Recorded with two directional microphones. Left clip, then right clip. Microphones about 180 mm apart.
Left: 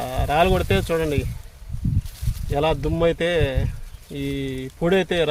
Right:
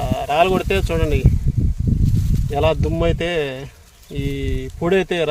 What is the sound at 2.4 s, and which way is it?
Speech, 50° right (ahead or behind).